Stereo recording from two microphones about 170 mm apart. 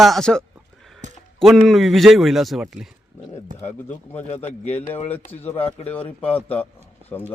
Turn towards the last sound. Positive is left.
turn(degrees=10)  # may be behind; listen again after turning